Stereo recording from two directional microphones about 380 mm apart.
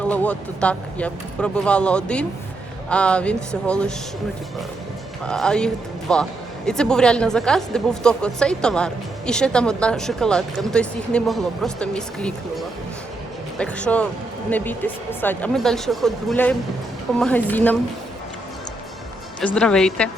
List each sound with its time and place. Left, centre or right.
0.0 s a woman's voice: centre
5.2 s a woman's voice: centre
19.5 s a woman's voice: centre